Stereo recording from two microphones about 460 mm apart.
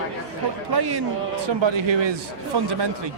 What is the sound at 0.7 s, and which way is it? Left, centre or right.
Speech, right.